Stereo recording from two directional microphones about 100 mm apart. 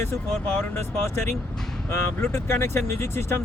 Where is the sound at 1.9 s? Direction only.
25° left (ahead or behind).